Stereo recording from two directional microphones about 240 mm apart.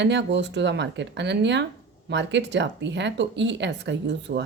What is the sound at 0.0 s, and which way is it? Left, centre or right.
A woman's voice, right.